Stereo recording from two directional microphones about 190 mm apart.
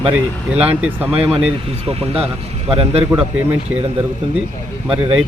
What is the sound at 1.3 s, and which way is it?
Speech, 30° right (ahead or behind).